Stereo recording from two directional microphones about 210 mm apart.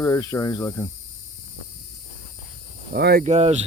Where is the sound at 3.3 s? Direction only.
30° right (ahead or behind).